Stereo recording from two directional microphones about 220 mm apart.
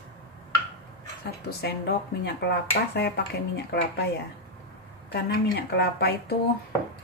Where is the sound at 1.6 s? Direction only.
45° left (ahead or behind).